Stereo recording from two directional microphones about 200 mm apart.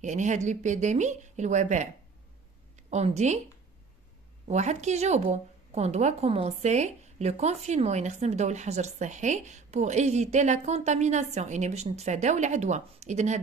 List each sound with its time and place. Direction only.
0.0 s a woman's voice: 35° right (ahead or behind)
4.5 s a woman's voice: 35° right (ahead or behind)